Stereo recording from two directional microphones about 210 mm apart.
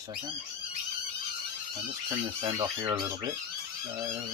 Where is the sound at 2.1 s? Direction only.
25° right (ahead or behind).